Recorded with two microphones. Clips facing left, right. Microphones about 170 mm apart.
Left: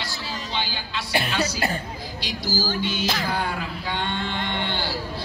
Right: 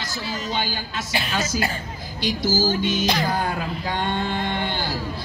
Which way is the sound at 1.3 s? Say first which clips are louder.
Even; 45° right (ahead or behind).